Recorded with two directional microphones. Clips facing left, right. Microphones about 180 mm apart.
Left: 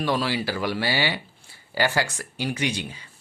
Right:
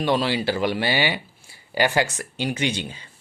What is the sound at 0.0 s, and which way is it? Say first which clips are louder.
Speech: right 3 dB; 25° right (ahead or behind).